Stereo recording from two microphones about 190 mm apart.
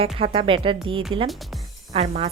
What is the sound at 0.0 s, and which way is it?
A woman's voice, 30° right (ahead or behind).